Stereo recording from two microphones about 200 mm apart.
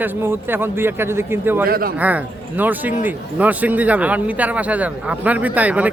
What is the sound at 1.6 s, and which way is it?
Speech, 50° right (ahead or behind).